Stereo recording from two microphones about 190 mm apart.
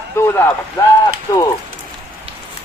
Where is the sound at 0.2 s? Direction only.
15° left (ahead or behind).